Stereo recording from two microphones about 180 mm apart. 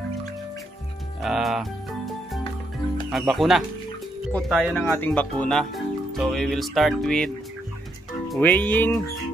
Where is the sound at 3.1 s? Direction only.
Centre (ahead or behind).